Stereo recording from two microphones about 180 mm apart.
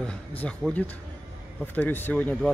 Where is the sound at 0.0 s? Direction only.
5° left (ahead or behind).